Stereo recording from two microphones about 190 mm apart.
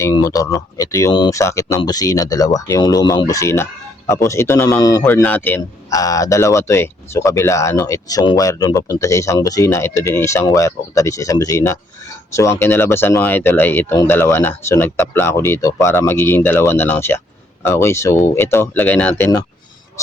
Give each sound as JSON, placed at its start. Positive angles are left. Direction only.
{"t": 0.0, "sound": "speech", "side_deg": 20}